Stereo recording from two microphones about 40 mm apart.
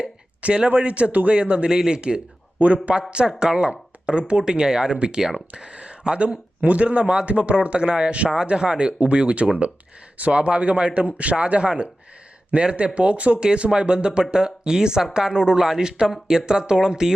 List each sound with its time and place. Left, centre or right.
0.0 s a sound: right
0.8 s speech: right
3.2 s speech: centre; by 13.4 s right
13.4 s speech: right